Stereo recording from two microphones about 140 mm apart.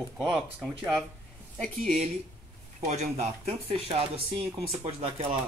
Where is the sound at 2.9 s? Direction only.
50° right (ahead or behind).